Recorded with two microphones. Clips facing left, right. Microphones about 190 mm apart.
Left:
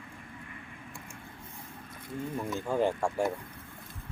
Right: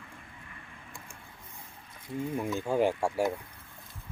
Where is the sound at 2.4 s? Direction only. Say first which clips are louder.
Right 1 dB; 10° right (ahead or behind).